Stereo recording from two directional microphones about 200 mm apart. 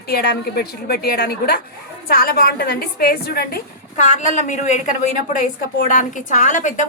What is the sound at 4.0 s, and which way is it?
A woman's voice, 35° left (ahead or behind).